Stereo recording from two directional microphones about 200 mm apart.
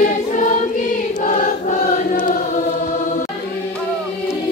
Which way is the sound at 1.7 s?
45° left (ahead or behind).